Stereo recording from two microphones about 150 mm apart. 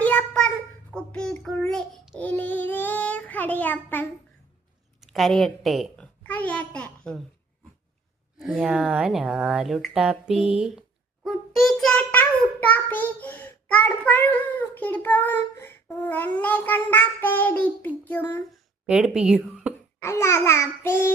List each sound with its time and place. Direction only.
0.0 s child singing: 10° left (ahead or behind)
4.9 s a woman's voice: centre (ahead or behind)
6.2 s a sound: 10° left (ahead or behind)
8.4 s speech: 5° right (ahead or behind); by 18.4 s 10° left (ahead or behind)
18.9 s speech: 5° right (ahead or behind)
20.0 s a child's voice: 15° left (ahead or behind)